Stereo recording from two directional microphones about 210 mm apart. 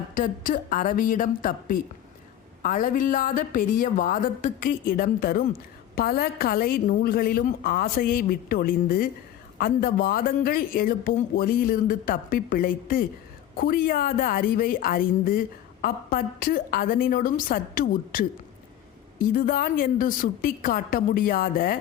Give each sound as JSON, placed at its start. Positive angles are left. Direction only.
{"t": 0.1, "sound": "a woman's voice", "side_deg": 40}